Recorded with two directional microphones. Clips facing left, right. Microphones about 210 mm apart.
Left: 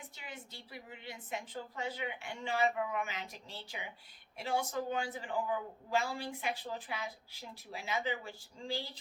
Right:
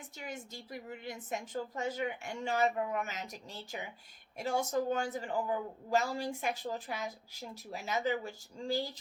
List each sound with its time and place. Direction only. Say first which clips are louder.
0.2 s speech: right 8 dB; 45° right (ahead or behind)